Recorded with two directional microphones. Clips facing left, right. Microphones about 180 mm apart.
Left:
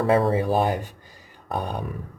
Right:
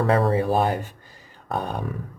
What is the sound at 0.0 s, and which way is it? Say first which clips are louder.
Speech: even; 30° right (ahead or behind).